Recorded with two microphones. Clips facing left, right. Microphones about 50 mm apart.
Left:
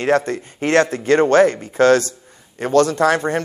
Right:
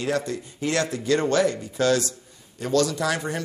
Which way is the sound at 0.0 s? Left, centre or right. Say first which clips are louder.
Left 8 dB; left.